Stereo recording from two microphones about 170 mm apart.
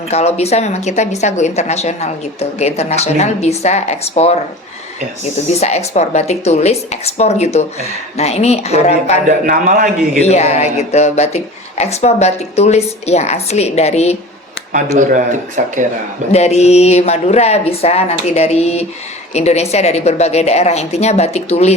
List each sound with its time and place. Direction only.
0.1 s a woman's voice: 40° left (ahead or behind)
9.5 s a man's voice: 55° right (ahead or behind)
10.2 s a woman's voice: 40° left (ahead or behind)
14.9 s speech: 50° right (ahead or behind)
16.3 s a woman's voice: 40° left (ahead or behind)